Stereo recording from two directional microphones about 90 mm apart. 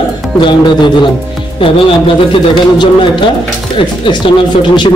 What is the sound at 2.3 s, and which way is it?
A man's voice, 65° left (ahead or behind).